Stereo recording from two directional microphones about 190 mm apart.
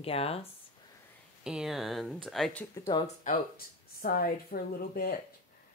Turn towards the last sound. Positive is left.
turn(degrees=50)  # may be behind; listen again after turning